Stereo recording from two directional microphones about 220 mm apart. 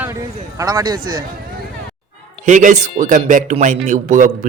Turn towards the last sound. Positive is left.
turn(degrees=-35)  # may be behind; listen again after turning